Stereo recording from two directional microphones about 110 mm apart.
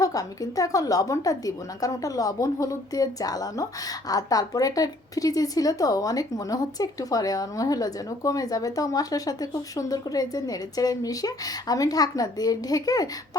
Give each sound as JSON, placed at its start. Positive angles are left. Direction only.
{"t": 0.0, "sound": "a woman's voice", "side_deg": 35}